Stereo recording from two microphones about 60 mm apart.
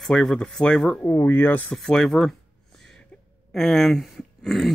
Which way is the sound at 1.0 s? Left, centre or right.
Left.